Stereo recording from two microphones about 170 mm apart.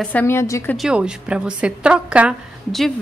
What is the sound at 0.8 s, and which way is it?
A woman's voice, 5° right (ahead or behind).